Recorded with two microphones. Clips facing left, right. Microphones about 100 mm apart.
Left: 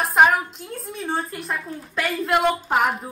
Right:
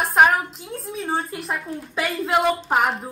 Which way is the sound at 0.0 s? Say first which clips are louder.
Even; centre (ahead or behind).